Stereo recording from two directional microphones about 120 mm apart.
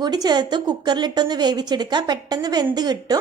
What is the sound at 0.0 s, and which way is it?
A woman's voice, 35° right (ahead or behind).